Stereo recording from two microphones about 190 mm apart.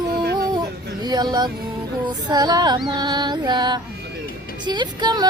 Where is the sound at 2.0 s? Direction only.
20° right (ahead or behind).